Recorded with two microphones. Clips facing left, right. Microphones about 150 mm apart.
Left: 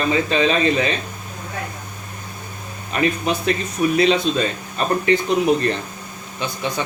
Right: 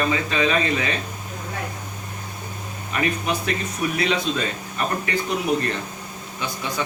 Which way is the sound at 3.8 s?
25° left (ahead or behind).